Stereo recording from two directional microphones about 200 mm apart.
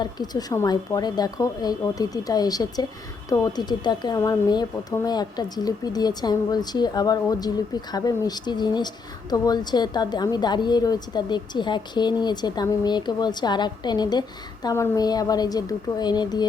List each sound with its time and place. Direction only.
0.0 s a woman's voice: 20° left (ahead or behind)